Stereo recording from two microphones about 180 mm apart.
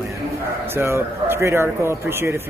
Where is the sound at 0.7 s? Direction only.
15° right (ahead or behind).